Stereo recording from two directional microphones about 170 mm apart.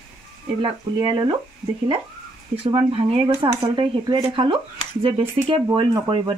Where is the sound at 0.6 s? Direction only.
25° right (ahead or behind).